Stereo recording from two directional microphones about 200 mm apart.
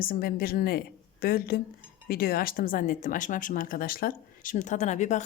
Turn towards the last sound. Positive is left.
turn(degrees=35)  # may be behind; listen again after turning